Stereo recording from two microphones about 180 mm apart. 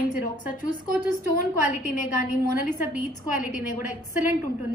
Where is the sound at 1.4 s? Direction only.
45° left (ahead or behind).